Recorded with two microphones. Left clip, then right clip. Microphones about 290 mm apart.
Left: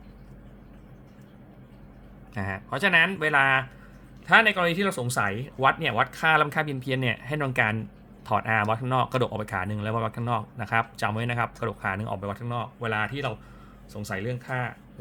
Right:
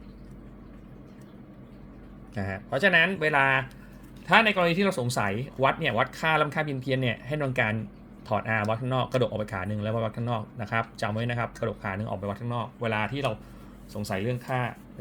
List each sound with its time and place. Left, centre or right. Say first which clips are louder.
2.3 s speech: right 1 dB; centre